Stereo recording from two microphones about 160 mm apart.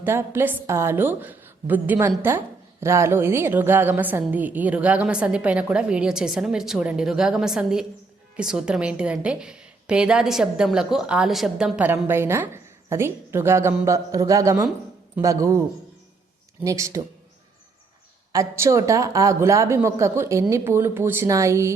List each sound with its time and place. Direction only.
0.0 s a woman's voice: 15° right (ahead or behind)
16.6 s a man's voice: 20° right (ahead or behind)
18.3 s a woman's voice: 20° right (ahead or behind)